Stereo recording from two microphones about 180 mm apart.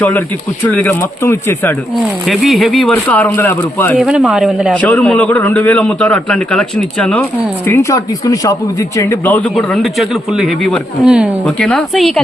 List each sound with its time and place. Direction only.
0.6 s a man's voice: 10° left (ahead or behind)
2.2 s a man's voice: centre (ahead or behind)
3.9 s a man's voice: 5° right (ahead or behind)
4.7 s a man's voice: 10° left (ahead or behind)